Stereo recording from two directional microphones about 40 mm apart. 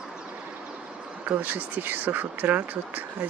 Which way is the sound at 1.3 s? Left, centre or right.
Right.